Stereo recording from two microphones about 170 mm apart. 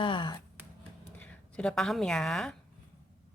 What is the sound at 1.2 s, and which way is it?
A woman's voice, 5° left (ahead or behind).